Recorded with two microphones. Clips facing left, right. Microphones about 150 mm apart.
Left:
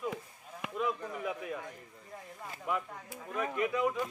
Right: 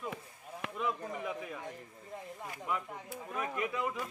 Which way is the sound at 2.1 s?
25° right (ahead or behind).